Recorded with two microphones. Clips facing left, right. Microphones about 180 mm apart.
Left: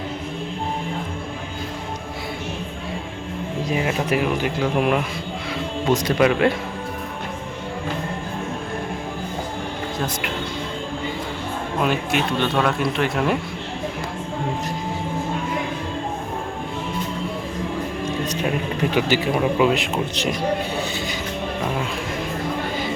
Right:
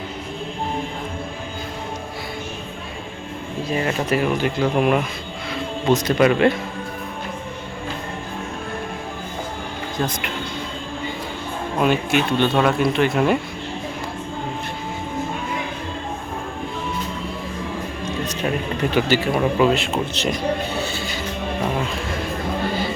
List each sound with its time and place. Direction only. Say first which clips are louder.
3.7 s speech: right 1 dB; 10° left (ahead or behind)
10.0 s speech: right 4 dB; centre (ahead or behind)
11.8 s speech: right 3 dB; centre (ahead or behind)
18.9 s speech: right 1 dB; 15° left (ahead or behind)
20.7 s music: even; 15° left (ahead or behind)